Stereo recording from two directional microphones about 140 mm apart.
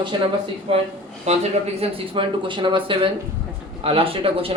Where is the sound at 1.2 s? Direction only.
50° right (ahead or behind).